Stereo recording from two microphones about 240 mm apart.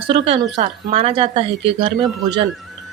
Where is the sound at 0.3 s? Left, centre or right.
Right.